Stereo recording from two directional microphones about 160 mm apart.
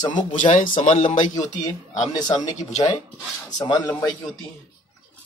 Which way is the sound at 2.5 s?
45° left (ahead or behind).